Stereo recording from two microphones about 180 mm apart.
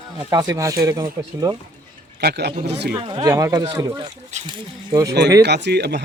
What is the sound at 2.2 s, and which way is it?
Speech, 60° right (ahead or behind).